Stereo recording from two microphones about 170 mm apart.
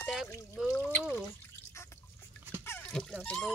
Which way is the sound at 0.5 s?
5° left (ahead or behind).